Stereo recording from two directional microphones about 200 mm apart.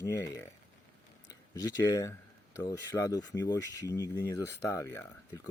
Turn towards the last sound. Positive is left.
turn(degrees=15)  # may be behind; listen again after turning